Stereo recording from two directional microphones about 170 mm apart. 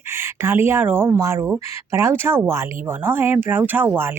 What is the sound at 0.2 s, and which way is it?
Speech, 15° right (ahead or behind).